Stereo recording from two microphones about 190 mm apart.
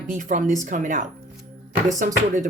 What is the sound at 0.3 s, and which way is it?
Speech, 40° right (ahead or behind).